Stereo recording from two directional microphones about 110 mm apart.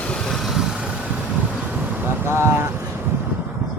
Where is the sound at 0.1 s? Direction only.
5° left (ahead or behind).